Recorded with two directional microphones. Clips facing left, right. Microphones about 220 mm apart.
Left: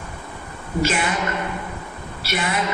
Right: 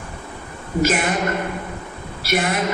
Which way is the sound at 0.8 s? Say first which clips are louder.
Right 3 dB; 45° right (ahead or behind).